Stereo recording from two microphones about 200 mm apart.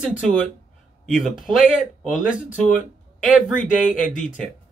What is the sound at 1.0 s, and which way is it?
Speech, centre (ahead or behind).